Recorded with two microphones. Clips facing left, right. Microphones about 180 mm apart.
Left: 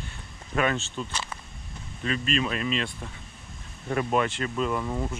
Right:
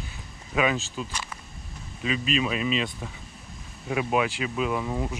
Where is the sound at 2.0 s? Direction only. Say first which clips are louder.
Right 1 dB; 5° right (ahead or behind).